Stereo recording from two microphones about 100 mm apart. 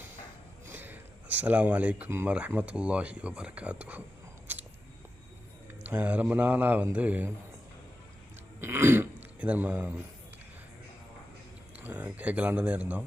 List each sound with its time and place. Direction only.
0.7 s a sound: 20° right (ahead or behind)
2.0 s speech: 25° right (ahead or behind)
2.3 s speech: 15° right (ahead or behind)
4.5 s a sound: 20° right (ahead or behind)
5.8 s speech: 15° right (ahead or behind)
8.6 s speech: 25° right (ahead or behind)
11.8 s speech: 15° right (ahead or behind)